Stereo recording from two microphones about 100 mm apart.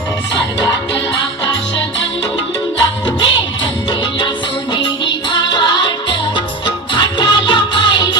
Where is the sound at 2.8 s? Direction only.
45° left (ahead or behind).